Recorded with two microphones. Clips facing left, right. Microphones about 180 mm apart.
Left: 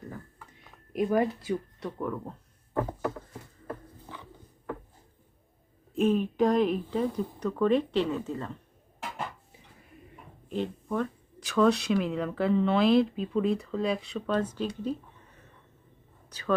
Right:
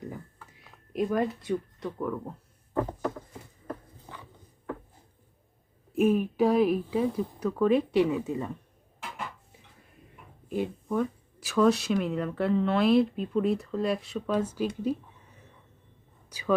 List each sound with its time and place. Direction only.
0.6 s speech: centre (ahead or behind)
5.9 s speech: 10° right (ahead or behind)
10.5 s speech: 10° right (ahead or behind)
16.3 s speech: 10° right (ahead or behind)